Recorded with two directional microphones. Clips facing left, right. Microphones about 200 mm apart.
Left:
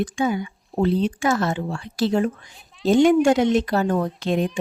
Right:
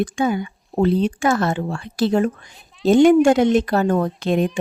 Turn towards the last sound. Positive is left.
turn(degrees=-55)  # may be behind; listen again after turning